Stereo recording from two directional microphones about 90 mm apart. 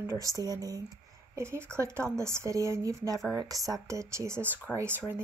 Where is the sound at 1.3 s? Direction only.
30° right (ahead or behind).